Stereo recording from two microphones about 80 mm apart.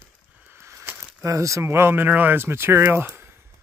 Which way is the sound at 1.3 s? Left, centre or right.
Right.